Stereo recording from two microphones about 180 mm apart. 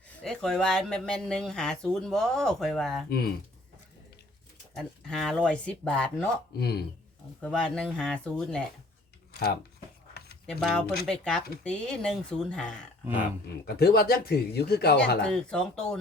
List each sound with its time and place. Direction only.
0.2 s speech: 5° left (ahead or behind)
3.1 s speech: 60° left (ahead or behind)
4.7 s speech: centre (ahead or behind)
6.6 s speech: 65° left (ahead or behind)
7.4 s speech: 5° left (ahead or behind)
10.4 s speech: centre (ahead or behind)
13.7 s speech: 60° left (ahead or behind)
15.3 s speech: 5° left (ahead or behind)